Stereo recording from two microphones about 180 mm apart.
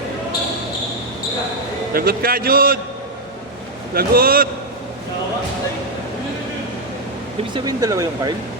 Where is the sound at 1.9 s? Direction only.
55° right (ahead or behind).